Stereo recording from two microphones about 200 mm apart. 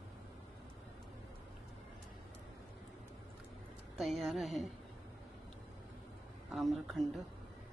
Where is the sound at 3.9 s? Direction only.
Centre (ahead or behind).